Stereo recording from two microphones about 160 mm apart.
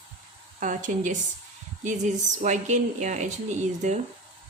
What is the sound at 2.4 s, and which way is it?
A woman's voice, 50° right (ahead or behind).